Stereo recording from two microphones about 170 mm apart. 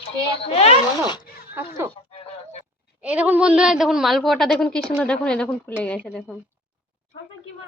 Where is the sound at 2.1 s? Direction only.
35° left (ahead or behind).